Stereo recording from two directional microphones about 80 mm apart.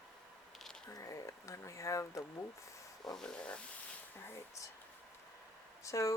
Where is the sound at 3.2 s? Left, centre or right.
Centre.